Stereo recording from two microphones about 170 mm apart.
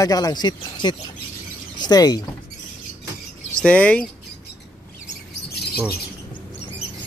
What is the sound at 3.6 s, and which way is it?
Speech, 5° left (ahead or behind).